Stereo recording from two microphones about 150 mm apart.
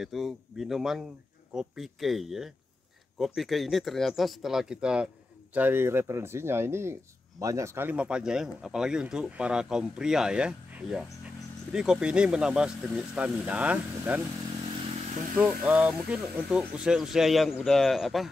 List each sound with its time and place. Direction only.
0.0 s speech: centre (ahead or behind)
15.0 s vehicle: 55° right (ahead or behind)
15.3 s speech: 10° right (ahead or behind)